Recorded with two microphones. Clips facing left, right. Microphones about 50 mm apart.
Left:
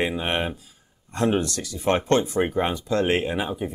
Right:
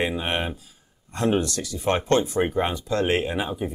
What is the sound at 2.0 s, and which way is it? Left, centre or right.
Speech, left.